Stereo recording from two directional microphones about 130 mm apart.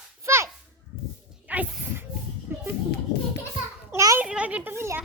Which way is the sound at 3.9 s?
25° right (ahead or behind).